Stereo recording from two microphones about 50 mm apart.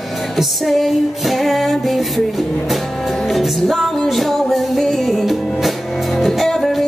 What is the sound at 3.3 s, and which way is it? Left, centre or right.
Music, centre.